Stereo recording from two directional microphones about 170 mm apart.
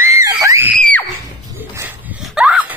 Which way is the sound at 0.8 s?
10° left (ahead or behind).